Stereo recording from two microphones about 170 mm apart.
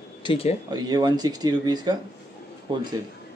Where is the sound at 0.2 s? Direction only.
35° left (ahead or behind).